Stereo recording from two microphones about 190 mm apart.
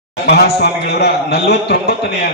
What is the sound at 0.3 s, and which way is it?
A man's voice, 55° left (ahead or behind).